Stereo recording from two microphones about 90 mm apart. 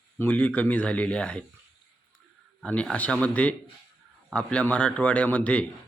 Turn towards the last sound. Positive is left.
turn(degrees=15)  # may be behind; listen again after turning